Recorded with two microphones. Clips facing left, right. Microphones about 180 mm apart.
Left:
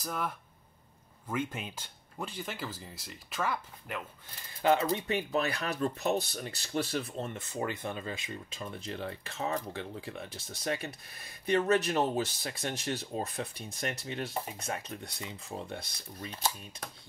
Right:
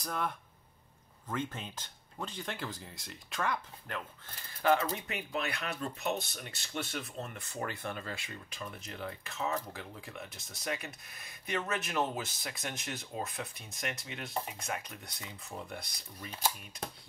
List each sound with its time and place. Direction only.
0.0 s speech: 5° left (ahead or behind)
1.3 s speech: 10° left (ahead or behind)
4.6 s speech: 20° left (ahead or behind)